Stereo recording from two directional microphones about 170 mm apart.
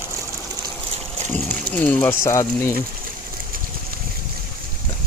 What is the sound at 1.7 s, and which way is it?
Speech, 10° left (ahead or behind).